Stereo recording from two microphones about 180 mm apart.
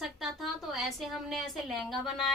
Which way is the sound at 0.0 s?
Centre (ahead or behind).